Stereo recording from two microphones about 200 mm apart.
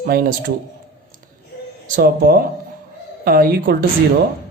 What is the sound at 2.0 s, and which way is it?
Speech, 50° right (ahead or behind).